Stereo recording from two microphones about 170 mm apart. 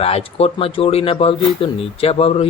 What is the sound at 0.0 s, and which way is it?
Speech, 35° left (ahead or behind).